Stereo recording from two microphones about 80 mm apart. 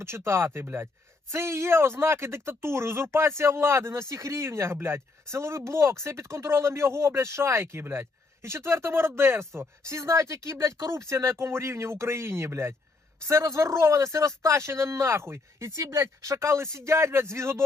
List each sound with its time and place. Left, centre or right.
0.0 s speech: right